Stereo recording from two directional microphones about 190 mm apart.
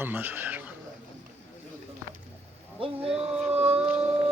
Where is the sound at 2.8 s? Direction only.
30° right (ahead or behind).